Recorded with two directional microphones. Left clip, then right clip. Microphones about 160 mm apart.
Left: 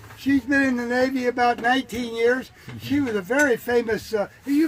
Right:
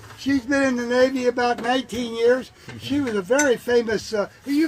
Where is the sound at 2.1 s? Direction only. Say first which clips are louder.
Right 2 dB; 15° left (ahead or behind).